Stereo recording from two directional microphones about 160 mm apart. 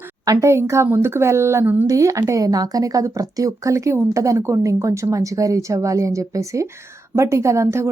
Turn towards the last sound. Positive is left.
turn(degrees=-20)  # may be behind; listen again after turning